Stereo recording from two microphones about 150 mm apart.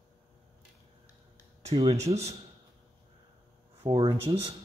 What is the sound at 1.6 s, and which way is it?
Speech, 40° right (ahead or behind).